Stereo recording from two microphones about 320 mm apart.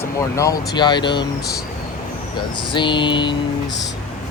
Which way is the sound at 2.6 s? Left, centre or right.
Centre.